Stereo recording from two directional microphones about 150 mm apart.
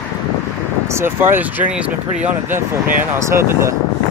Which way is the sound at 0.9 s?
15° right (ahead or behind).